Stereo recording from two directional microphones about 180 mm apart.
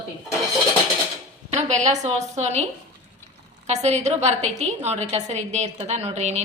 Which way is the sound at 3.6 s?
40° right (ahead or behind).